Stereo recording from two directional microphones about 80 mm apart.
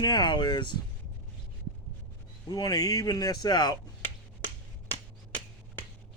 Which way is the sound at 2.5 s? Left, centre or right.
Left.